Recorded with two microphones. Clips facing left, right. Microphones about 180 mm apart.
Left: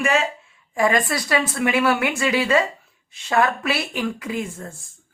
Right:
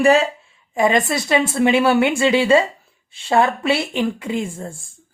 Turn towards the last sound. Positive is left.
turn(degrees=-30)  # may be behind; listen again after turning